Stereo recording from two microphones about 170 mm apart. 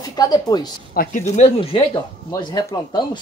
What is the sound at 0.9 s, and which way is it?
Speech, 45° left (ahead or behind).